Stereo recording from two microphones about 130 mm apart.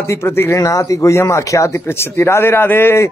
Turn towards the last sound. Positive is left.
turn(degrees=15)  # may be behind; listen again after turning